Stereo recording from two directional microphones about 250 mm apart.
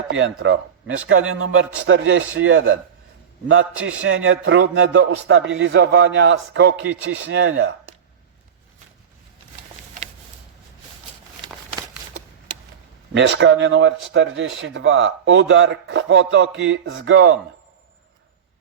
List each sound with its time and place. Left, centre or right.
0.1 s speech: right
3.8 s speech: right
13.1 s speech: right